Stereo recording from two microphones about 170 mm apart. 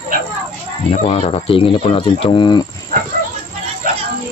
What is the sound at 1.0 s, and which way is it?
Speech, 35° left (ahead or behind).